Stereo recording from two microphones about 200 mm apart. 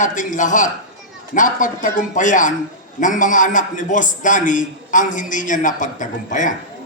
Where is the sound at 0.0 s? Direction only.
40° left (ahead or behind).